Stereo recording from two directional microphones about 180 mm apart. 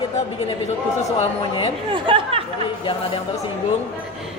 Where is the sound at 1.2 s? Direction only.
35° left (ahead or behind).